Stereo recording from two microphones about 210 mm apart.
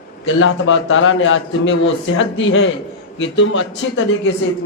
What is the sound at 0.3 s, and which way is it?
A man's voice, 70° left (ahead or behind).